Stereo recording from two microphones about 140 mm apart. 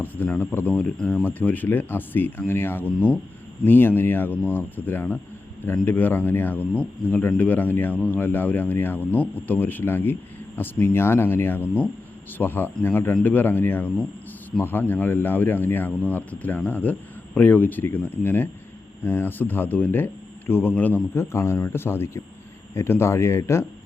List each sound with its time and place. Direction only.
0.0 s speech: 15° left (ahead or behind)